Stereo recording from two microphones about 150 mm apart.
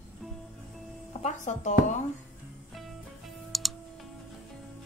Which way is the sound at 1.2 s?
55° left (ahead or behind).